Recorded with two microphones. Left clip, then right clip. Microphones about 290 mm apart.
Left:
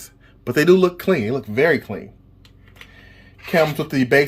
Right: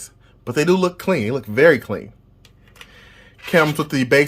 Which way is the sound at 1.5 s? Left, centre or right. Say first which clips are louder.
Right 4 dB; right.